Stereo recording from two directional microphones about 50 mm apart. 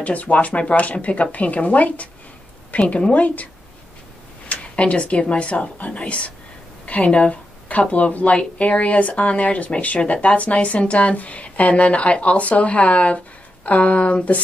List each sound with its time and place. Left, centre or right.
0.0 s a woman's voice: left
4.5 s speech: left